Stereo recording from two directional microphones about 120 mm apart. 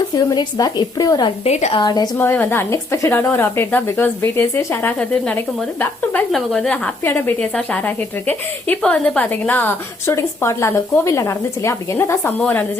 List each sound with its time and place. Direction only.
0.3 s speech: 35° left (ahead or behind)
1.5 s a woman's voice: 65° left (ahead or behind)
1.7 s speech: 35° left (ahead or behind)
2.1 s a woman's voice: 15° left (ahead or behind)